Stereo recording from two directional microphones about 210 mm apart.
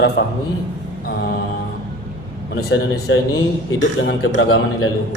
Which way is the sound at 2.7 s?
60° left (ahead or behind).